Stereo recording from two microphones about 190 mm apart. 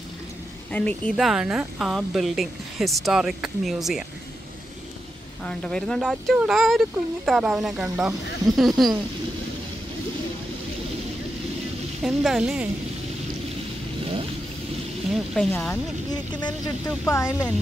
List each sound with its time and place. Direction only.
0.7 s a woman's voice: 10° left (ahead or behind)
5.4 s a woman's voice: 5° left (ahead or behind)
12.0 s a woman's voice: centre (ahead or behind)
15.1 s a woman's voice: 5° left (ahead or behind)
15.7 s speech: 20° left (ahead or behind)